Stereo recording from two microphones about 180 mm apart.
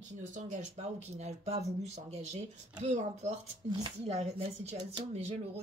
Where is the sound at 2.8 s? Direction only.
40° right (ahead or behind).